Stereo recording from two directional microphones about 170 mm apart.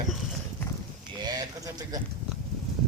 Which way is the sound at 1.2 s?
20° right (ahead or behind).